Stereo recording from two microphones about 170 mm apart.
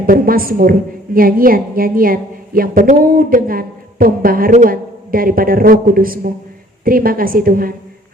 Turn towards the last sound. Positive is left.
turn(degrees=-55)  # may be behind; listen again after turning